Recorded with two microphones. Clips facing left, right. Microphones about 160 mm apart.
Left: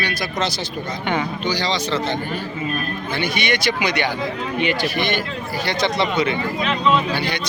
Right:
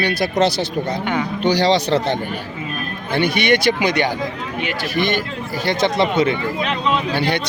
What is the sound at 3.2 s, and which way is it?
Speech, 60° right (ahead or behind).